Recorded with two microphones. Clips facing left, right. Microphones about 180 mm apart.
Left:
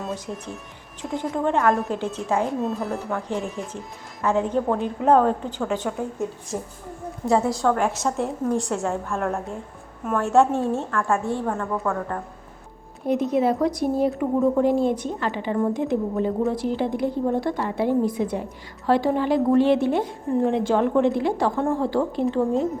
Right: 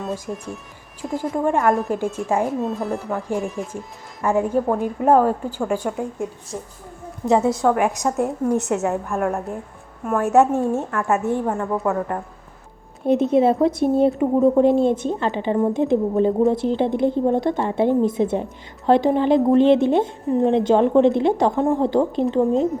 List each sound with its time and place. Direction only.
0.3 s a woman's voice: 10° right (ahead or behind)
2.5 s speech: centre (ahead or behind)
3.2 s a woman's voice: 10° right (ahead or behind)
6.5 s a woman's voice: 5° left (ahead or behind)
7.3 s a woman's voice: 20° right (ahead or behind)
8.5 s a woman's voice: 20° right (ahead or behind)
13.3 s a woman's voice: 25° right (ahead or behind)